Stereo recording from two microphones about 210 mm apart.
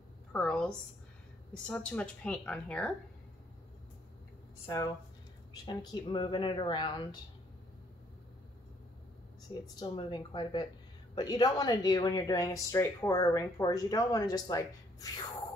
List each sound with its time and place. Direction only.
0.3 s a sound: 5° left (ahead or behind)
1.7 s speech: 5° left (ahead or behind)
4.6 s speech: 15° left (ahead or behind)
9.5 s speech: 20° left (ahead or behind)